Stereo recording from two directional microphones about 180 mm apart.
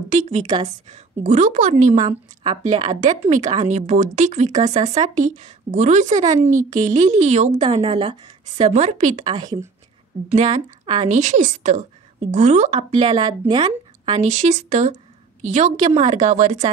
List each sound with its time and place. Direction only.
0.1 s a woman's voice: 40° right (ahead or behind)
2.4 s speech: 25° right (ahead or behind)
3.3 s speech: 40° right (ahead or behind)
9.2 s speech: 25° right (ahead or behind)
11.1 s speech: 40° right (ahead or behind)
13.2 s speech: 25° right (ahead or behind)
14.2 s speech: 40° right (ahead or behind)